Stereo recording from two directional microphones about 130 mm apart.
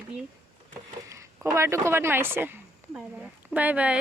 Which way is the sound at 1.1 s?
20° right (ahead or behind).